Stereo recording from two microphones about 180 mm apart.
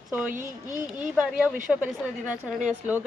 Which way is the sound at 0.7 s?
45° right (ahead or behind).